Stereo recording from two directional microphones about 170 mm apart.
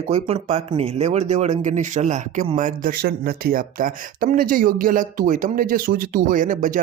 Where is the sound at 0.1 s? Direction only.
40° right (ahead or behind).